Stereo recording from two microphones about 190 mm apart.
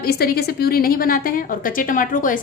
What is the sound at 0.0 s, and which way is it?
A woman's voice, 55° left (ahead or behind).